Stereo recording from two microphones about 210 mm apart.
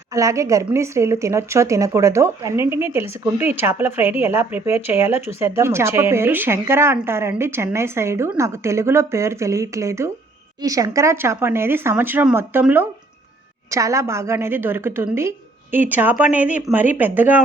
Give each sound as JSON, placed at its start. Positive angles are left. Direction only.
{"t": 0.1, "sound": "a woman's voice", "side_deg": -15}